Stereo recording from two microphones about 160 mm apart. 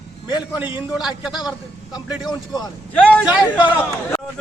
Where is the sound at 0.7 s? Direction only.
5° right (ahead or behind).